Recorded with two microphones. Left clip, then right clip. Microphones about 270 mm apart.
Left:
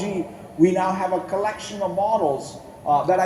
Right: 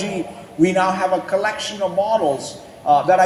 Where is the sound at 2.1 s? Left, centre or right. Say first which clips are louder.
Right 3 dB; right.